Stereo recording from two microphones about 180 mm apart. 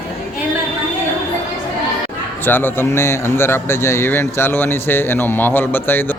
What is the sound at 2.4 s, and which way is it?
A man's voice, 10° left (ahead or behind).